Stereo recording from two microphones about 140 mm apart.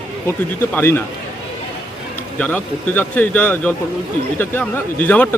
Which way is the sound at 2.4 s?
10° left (ahead or behind).